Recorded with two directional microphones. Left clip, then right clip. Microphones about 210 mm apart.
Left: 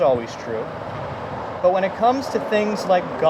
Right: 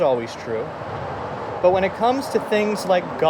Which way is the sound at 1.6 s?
40° right (ahead or behind).